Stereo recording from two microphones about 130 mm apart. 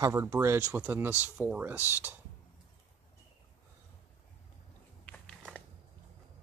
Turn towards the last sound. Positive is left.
turn(degrees=5)  # may be behind; listen again after turning